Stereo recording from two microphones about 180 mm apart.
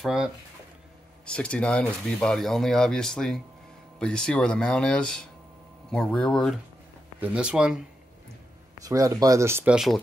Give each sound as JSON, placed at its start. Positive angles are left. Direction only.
{"t": 0.0, "sound": "speech", "side_deg": -5}
{"t": 8.8, "sound": "speech", "side_deg": -20}